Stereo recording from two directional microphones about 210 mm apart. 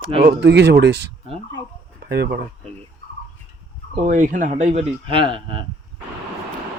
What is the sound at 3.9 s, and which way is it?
Speech, 35° right (ahead or behind).